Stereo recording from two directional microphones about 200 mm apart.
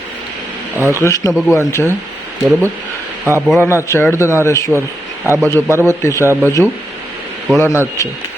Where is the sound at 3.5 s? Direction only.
10° left (ahead or behind).